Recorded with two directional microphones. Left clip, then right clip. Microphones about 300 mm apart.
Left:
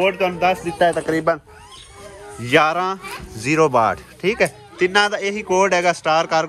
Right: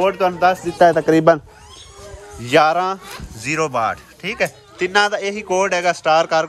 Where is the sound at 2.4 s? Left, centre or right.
Centre.